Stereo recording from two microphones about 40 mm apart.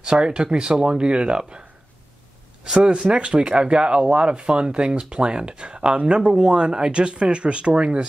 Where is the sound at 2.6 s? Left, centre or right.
Right.